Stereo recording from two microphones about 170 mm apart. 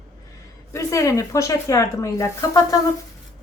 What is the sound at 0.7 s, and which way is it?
A woman's voice, 15° left (ahead or behind).